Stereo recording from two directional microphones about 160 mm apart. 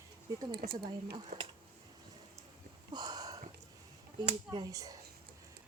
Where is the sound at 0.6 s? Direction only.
90° right.